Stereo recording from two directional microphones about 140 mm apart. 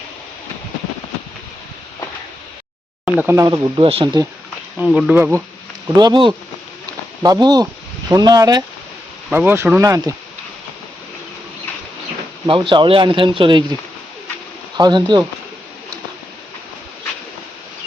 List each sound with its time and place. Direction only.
3.1 s speech: 10° right (ahead or behind)
3.3 s speech: 25° right (ahead or behind)
3.8 s speech: 40° right (ahead or behind)
4.9 s speech: 5° right (ahead or behind)
6.0 s speech: 30° right (ahead or behind)
9.3 s speech: 15° right (ahead or behind)
12.5 s speech: 35° right (ahead or behind)
14.8 s speech: 35° right (ahead or behind)